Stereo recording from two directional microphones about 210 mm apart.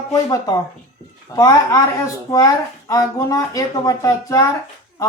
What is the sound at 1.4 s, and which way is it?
Speech, 15° left (ahead or behind).